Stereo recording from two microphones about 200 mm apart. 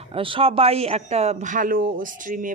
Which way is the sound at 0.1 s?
25° right (ahead or behind).